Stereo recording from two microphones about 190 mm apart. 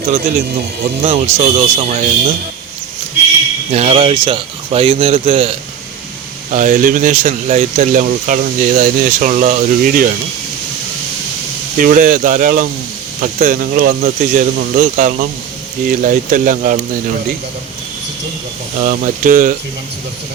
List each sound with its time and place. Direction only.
1.0 s a man's voice: 30° right (ahead or behind)
3.7 s a man's voice: 35° right (ahead or behind)
6.5 s speech: 40° right (ahead or behind)
11.8 s speech: 45° right (ahead or behind)
18.8 s speech: 45° right (ahead or behind)